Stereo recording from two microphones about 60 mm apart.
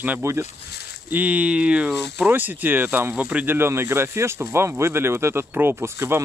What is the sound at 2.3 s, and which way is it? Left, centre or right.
Speech, right.